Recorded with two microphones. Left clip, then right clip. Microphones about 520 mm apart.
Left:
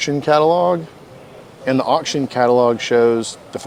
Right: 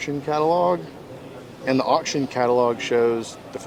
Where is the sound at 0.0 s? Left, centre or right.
Left.